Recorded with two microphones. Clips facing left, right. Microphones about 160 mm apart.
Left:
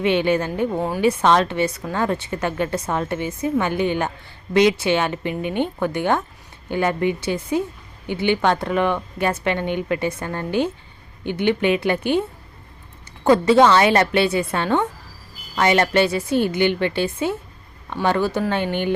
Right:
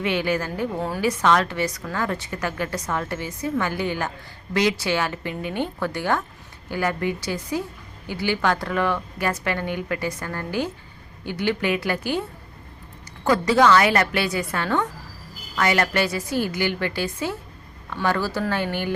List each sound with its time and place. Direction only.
0.0 s a woman's voice: 25° left (ahead or behind)
13.2 s a woman's voice: 25° left (ahead or behind)